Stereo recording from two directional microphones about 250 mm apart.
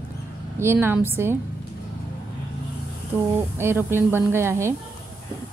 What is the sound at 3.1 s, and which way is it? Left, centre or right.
Speech, centre.